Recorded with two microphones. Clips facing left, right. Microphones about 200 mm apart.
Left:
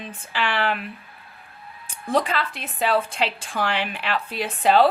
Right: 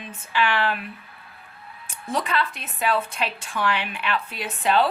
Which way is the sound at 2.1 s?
35° left (ahead or behind).